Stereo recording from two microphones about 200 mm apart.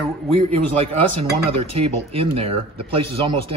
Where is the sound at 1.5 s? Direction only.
30° right (ahead or behind).